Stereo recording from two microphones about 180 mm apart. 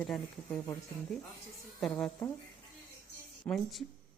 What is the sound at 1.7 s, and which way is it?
Speech, 5° left (ahead or behind).